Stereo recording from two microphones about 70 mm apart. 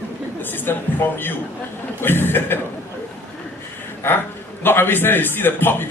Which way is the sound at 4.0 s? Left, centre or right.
Left.